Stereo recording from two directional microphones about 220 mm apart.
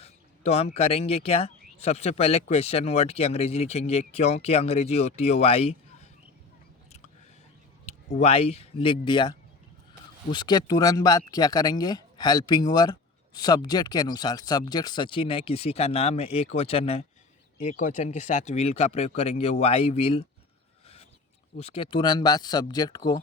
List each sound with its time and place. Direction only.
0.0 s speech: 30° left (ahead or behind)
7.9 s speech: 30° left (ahead or behind)
20.8 s a sound: 30° left (ahead or behind)
21.6 s speech: 25° left (ahead or behind)